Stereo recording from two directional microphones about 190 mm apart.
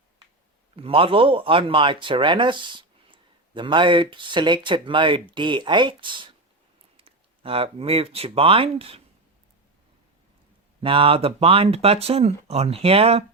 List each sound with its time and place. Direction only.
0.8 s speech: 30° right (ahead or behind)
10.8 s speech: 30° right (ahead or behind)